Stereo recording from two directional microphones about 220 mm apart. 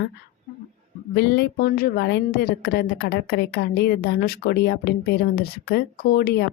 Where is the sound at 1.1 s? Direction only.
50° left (ahead or behind).